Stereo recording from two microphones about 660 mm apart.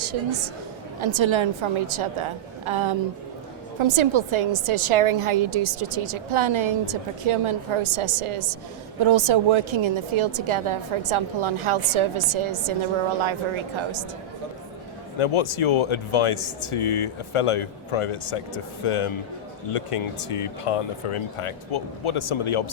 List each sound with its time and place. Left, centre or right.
0.0 s a woman's voice: right
15.2 s speech: left